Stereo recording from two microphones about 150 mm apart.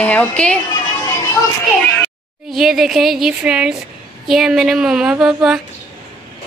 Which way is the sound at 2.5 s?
5° right (ahead or behind).